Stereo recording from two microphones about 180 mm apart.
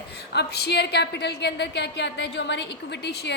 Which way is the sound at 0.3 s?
65° left (ahead or behind).